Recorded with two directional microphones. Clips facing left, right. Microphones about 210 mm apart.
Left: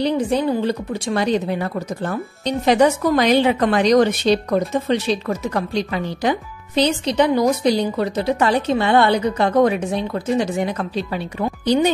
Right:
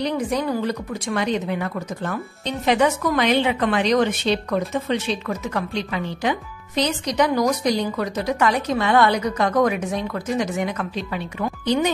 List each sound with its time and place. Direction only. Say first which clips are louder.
0.0 s speech: left 4 dB; 30° left (ahead or behind)